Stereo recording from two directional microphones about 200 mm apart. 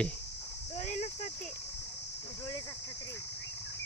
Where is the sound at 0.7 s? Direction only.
35° left (ahead or behind).